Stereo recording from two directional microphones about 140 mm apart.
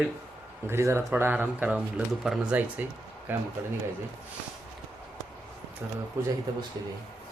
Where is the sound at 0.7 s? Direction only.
20° right (ahead or behind).